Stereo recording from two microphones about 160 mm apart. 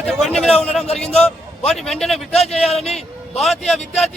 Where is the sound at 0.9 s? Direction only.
40° left (ahead or behind).